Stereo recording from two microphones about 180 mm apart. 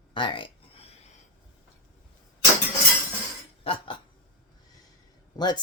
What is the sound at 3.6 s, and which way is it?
Cutlery, 30° left (ahead or behind).